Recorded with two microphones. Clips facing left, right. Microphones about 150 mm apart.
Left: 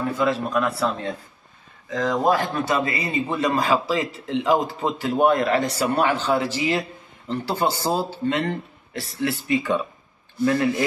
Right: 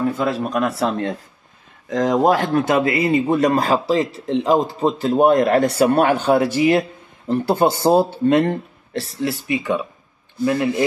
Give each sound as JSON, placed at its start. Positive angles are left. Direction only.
{"t": 0.2, "sound": "a man's voice", "side_deg": -40}
{"t": 1.9, "sound": "speech", "side_deg": -55}
{"t": 3.3, "sound": "a man's voice", "side_deg": -45}
{"t": 9.3, "sound": "speech", "side_deg": -15}